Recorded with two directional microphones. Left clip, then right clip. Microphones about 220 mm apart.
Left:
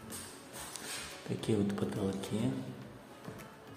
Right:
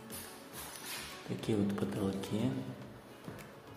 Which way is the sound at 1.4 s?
5° left (ahead or behind).